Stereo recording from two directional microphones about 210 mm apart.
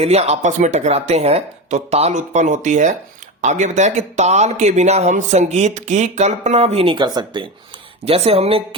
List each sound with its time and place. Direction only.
0.0 s speech: 30° right (ahead or behind)